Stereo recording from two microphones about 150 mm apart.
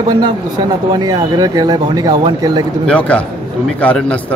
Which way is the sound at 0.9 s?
25° right (ahead or behind).